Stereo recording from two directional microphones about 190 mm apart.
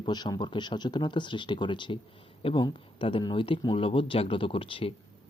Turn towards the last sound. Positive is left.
turn(degrees=30)  # may be behind; listen again after turning